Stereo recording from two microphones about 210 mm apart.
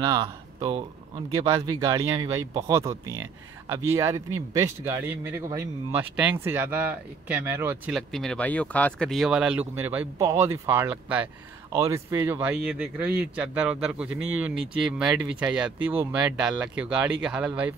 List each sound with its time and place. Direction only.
0.0 s speech: 20° right (ahead or behind); by 17.5 s 5° right (ahead or behind)